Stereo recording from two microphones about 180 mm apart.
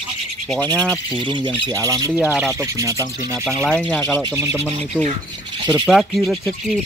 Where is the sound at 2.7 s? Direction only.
20° right (ahead or behind).